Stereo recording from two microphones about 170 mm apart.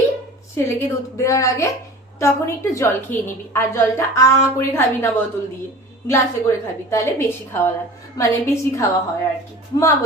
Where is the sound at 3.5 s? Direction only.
15° left (ahead or behind).